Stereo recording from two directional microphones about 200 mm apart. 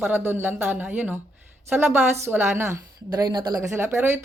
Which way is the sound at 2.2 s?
10° right (ahead or behind).